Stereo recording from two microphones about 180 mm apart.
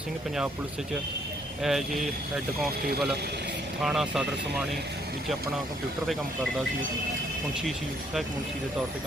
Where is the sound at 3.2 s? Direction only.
65° right (ahead or behind).